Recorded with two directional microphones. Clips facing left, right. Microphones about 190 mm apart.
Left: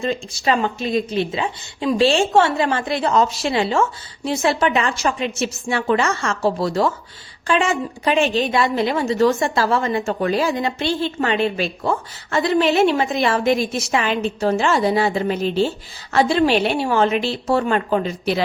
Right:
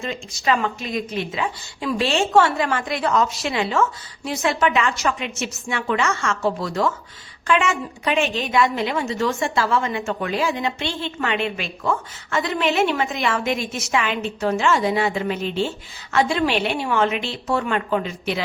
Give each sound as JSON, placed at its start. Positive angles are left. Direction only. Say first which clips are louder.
{"t": 0.0, "sound": "a woman's voice", "louder": "left 4 dB", "side_deg": 30}